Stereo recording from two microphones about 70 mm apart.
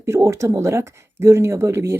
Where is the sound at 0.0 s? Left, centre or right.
Right.